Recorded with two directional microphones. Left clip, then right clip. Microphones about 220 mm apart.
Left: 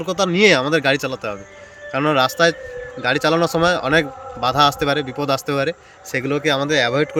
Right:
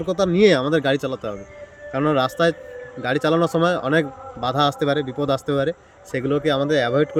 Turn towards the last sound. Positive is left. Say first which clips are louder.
# left 1 dB
turn(degrees=-10)  # may be behind; listen again after turning